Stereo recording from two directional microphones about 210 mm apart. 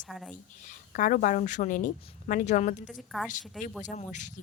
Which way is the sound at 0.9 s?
40° left (ahead or behind).